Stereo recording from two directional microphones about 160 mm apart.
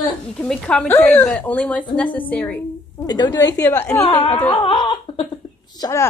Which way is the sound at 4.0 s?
35° left (ahead or behind).